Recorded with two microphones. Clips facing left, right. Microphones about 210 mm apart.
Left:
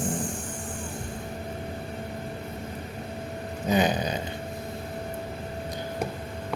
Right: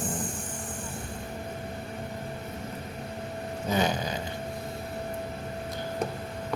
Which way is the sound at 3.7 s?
15° left (ahead or behind).